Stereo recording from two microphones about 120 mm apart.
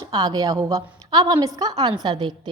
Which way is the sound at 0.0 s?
30° right (ahead or behind).